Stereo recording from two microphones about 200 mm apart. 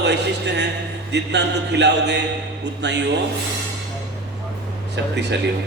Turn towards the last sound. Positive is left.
turn(degrees=-60)  # may be behind; listen again after turning